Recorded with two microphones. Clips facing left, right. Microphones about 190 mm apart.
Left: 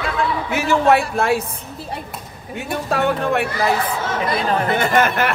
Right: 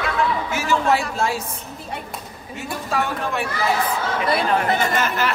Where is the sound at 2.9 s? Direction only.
60° left (ahead or behind).